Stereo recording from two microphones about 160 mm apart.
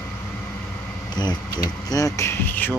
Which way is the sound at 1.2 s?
25° left (ahead or behind).